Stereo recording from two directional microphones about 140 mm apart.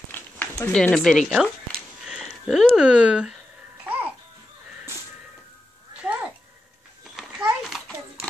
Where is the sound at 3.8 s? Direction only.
10° right (ahead or behind).